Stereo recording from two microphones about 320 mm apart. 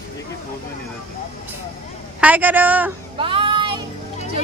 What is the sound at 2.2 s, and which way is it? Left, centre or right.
Speech, centre.